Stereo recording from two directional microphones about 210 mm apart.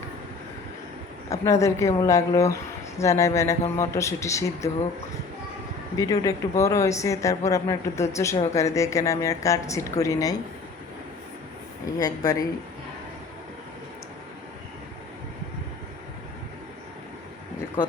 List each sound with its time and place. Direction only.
1.3 s speech: 15° left (ahead or behind)
6.0 s speech: 15° left (ahead or behind)
11.9 s speech: 15° left (ahead or behind)